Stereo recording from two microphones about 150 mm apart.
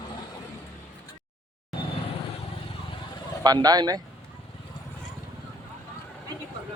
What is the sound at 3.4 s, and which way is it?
Speech, 25° right (ahead or behind).